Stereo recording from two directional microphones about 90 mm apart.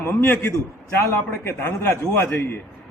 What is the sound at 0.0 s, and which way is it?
Speech, 25° left (ahead or behind).